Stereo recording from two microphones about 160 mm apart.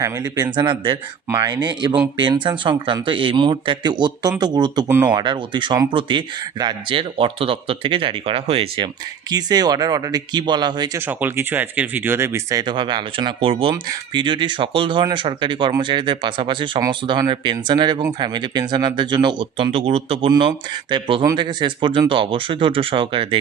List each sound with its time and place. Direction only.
0.0 s speech: 25° right (ahead or behind)
4.9 s speech: 15° right (ahead or behind)
5.1 s speech: 30° right (ahead or behind)
10.9 s speech: 10° right (ahead or behind); by 23.4 s 35° right (ahead or behind)